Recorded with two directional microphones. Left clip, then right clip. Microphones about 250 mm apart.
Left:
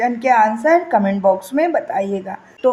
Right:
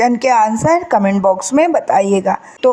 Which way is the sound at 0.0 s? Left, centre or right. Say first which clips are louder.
Right 2 dB; right.